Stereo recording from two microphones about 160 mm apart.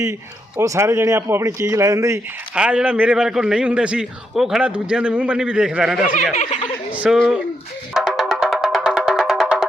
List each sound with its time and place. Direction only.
0.6 s speech: 20° right (ahead or behind)
2.6 s a man's voice: 5° right (ahead or behind)
7.9 s music: centre (ahead or behind)